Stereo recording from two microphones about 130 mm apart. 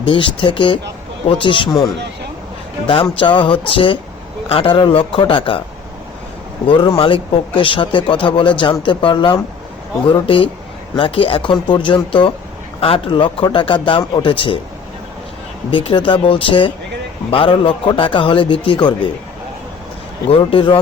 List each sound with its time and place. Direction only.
0.0 s a man's voice: 40° left (ahead or behind)
6.7 s a man's voice: 40° left (ahead or behind)
15.7 s a man's voice: 40° left (ahead or behind)
20.5 s a man's voice: 45° left (ahead or behind)